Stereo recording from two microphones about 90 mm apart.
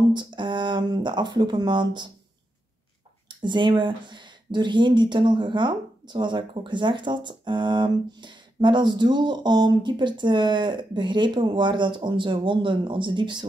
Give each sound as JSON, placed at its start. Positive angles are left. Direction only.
{"t": 0.1, "sound": "speech", "side_deg": -60}
{"t": 3.3, "sound": "speech", "side_deg": -60}